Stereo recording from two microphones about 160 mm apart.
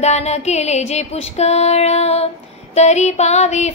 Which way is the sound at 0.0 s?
45° left (ahead or behind).